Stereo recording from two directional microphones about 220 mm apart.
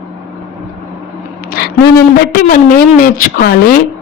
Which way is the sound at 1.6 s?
40° left (ahead or behind).